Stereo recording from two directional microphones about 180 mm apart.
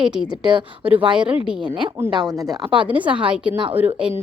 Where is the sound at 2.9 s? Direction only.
10° right (ahead or behind).